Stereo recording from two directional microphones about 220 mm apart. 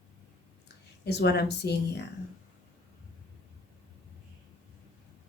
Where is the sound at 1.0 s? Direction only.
50° left (ahead or behind).